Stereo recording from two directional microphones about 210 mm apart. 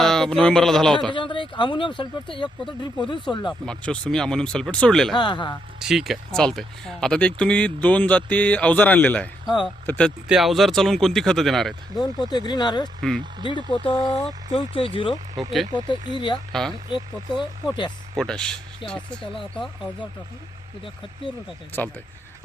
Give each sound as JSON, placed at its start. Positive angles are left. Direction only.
{"t": 0.0, "sound": "speech", "side_deg": 0}
{"t": 1.1, "sound": "speech", "side_deg": 25}
{"t": 3.7, "sound": "speech", "side_deg": 5}
{"t": 5.1, "sound": "speech", "side_deg": 20}
{"t": 5.8, "sound": "speech", "side_deg": 0}
{"t": 11.9, "sound": "speech", "side_deg": 20}
{"t": 13.0, "sound": "speech", "side_deg": 0}
{"t": 13.4, "sound": "speech", "side_deg": 20}
{"t": 16.5, "sound": "speech", "side_deg": 0}
{"t": 16.9, "sound": "speech", "side_deg": 20}
{"t": 18.2, "sound": "speech", "side_deg": 5}
{"t": 19.6, "sound": "speech", "side_deg": 20}